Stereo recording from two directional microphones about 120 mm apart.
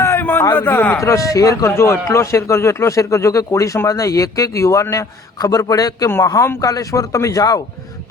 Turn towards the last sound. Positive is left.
turn(degrees=30)  # may be behind; listen again after turning